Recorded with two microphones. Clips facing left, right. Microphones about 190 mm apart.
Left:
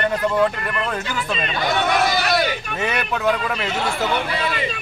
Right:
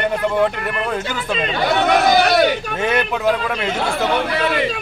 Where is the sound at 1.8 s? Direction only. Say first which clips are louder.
Right 6 dB; 65° right (ahead or behind).